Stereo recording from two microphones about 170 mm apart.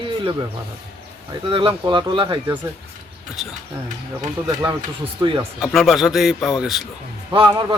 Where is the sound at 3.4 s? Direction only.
Centre (ahead or behind).